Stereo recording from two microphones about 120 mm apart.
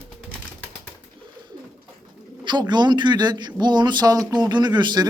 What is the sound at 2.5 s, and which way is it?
Speech, 40° right (ahead or behind).